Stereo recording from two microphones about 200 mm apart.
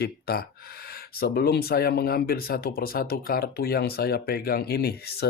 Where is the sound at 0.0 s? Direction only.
50° left (ahead or behind).